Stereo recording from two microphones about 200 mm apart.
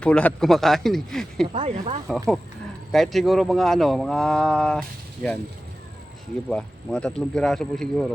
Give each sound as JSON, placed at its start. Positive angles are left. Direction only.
{"t": 0.0, "sound": "speech", "side_deg": 5}
{"t": 1.5, "sound": "speech", "side_deg": -30}
{"t": 2.9, "sound": "speech", "side_deg": 0}
{"t": 6.5, "sound": "speech", "side_deg": 5}